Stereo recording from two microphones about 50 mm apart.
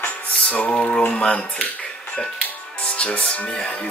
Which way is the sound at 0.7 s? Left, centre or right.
Centre.